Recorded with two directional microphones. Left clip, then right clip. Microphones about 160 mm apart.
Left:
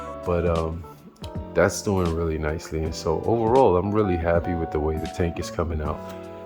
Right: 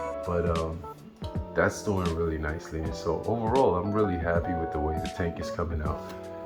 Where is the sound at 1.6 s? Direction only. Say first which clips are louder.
Left 5 dB; 85° left.